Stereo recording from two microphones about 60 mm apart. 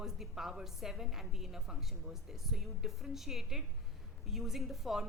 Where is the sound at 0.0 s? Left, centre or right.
Centre.